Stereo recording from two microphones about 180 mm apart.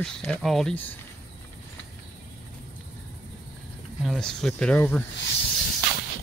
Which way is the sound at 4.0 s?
Centre (ahead or behind).